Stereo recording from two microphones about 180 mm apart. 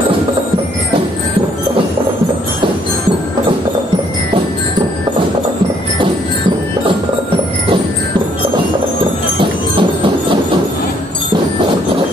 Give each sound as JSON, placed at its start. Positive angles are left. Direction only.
{"t": 9.4, "sound": "clip-clop", "side_deg": -30}